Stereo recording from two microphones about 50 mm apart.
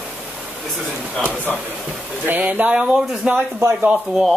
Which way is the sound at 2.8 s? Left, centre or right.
Right.